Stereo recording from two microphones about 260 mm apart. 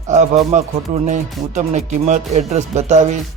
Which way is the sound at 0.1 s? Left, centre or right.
Right.